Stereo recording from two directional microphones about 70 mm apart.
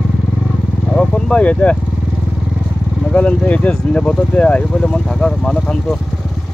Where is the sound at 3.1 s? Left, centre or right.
Centre.